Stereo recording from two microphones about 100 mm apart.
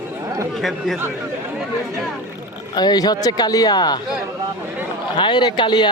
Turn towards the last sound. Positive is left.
turn(degrees=50)  # may be behind; listen again after turning